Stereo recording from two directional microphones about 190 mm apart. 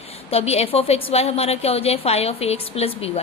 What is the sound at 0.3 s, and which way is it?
A woman's voice, 30° left (ahead or behind).